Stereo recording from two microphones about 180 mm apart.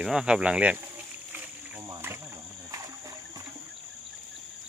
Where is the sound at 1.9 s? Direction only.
10° right (ahead or behind).